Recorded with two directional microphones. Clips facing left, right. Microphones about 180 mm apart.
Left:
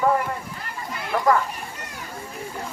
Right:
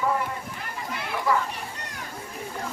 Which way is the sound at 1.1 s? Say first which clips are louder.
Left 5 dB; 45° left (ahead or behind).